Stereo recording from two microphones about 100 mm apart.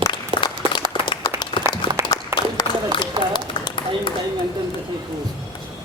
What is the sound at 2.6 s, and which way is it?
Run, 50° left (ahead or behind).